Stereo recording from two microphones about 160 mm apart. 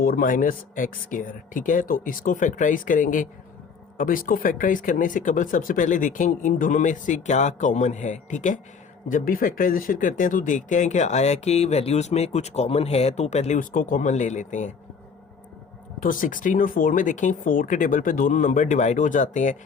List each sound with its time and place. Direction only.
0.0 s speech: 60° left (ahead or behind)
16.0 s speech: 55° left (ahead or behind)